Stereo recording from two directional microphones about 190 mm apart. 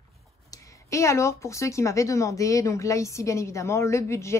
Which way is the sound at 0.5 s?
15° left (ahead or behind).